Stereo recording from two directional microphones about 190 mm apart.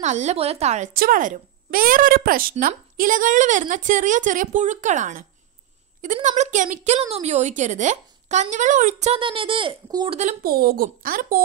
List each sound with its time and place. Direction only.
0.0 s a woman's voice: 35° right (ahead or behind)
0.9 s a woman's voice: 50° right (ahead or behind); by 10.1 s 25° right (ahead or behind)
10.4 s a woman's voice: 50° right (ahead or behind)